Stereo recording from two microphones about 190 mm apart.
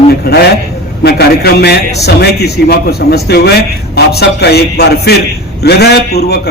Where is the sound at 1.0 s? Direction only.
60° left (ahead or behind).